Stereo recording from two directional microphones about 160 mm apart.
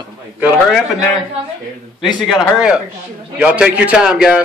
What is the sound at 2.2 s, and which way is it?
A man's voice, centre (ahead or behind).